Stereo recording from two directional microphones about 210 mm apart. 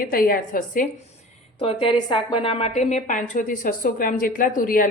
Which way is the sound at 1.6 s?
25° left (ahead or behind).